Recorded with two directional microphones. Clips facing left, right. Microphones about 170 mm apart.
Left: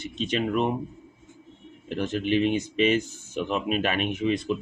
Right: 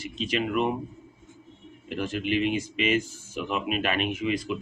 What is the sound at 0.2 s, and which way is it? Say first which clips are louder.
Speech: left 1 dB; 35° left (ahead or behind).